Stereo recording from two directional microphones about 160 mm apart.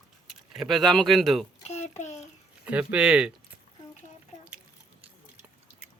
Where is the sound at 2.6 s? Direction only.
10° right (ahead or behind).